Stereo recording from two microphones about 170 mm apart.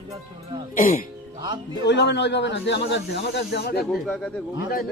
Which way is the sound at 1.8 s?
90° left.